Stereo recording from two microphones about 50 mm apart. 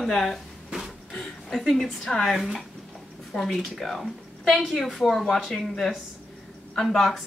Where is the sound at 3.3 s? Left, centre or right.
Centre.